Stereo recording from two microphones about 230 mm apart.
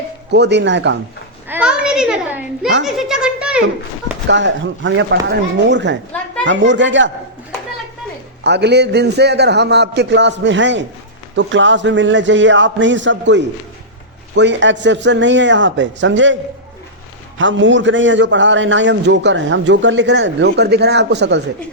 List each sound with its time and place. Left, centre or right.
0.3 s a man's voice: right
1.5 s a sound: centre
2.8 s a child's voice: centre
4.3 s a man's voice: right
8.4 s a man's voice: right